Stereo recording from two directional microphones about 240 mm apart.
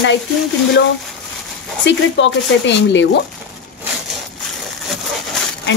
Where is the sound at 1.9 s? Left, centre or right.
Left.